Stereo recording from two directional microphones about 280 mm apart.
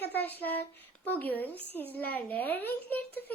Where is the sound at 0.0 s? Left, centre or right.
Centre.